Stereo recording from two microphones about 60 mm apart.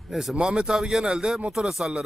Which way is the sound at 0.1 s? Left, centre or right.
Centre.